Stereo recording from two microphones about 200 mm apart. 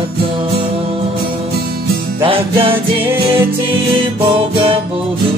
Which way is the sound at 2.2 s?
25° right (ahead or behind).